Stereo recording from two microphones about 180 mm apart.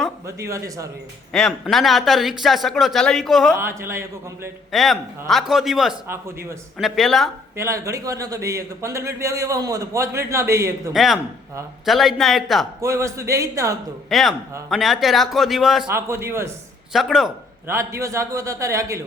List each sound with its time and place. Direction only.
0.3 s speech: 15° right (ahead or behind)
1.3 s a man's voice: centre (ahead or behind)
3.6 s speech: 15° right (ahead or behind)
4.7 s a man's voice: centre (ahead or behind)
6.1 s speech: 15° right (ahead or behind)
6.7 s a man's voice: centre (ahead or behind)
7.5 s speech: 15° right (ahead or behind)
10.9 s a man's voice: centre (ahead or behind)
12.8 s speech: 15° right (ahead or behind)
14.1 s a man's voice: centre (ahead or behind)
15.9 s speech: 15° right (ahead or behind)
16.9 s a man's voice: centre (ahead or behind)
17.7 s speech: 15° right (ahead or behind)